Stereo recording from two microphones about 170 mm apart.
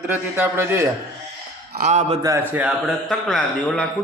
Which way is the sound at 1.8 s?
45° right (ahead or behind).